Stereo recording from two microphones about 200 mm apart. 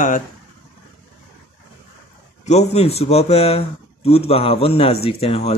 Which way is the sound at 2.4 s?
35° left (ahead or behind).